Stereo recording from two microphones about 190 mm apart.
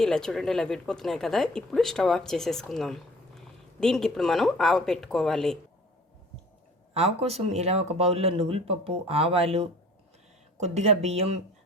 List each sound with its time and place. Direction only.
0.0 s speech: 5° left (ahead or behind)
6.9 s speech: 35° right (ahead or behind)